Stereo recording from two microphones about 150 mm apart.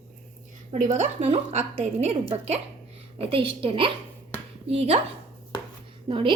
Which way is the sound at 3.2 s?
35° right (ahead or behind).